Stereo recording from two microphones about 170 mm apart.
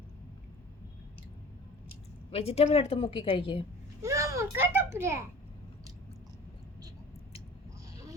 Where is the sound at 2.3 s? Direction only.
35° left (ahead or behind).